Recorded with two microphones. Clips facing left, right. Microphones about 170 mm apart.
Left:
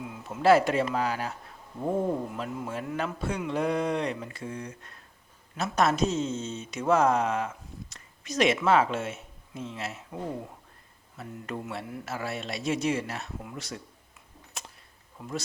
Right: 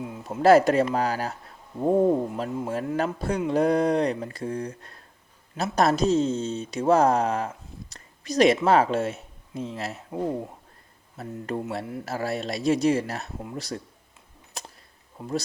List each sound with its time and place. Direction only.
0.1 s speech: 35° right (ahead or behind)
11.2 s speech: 35° right (ahead or behind)
14.5 s a sound: 35° right (ahead or behind)
15.2 s speech: 30° right (ahead or behind)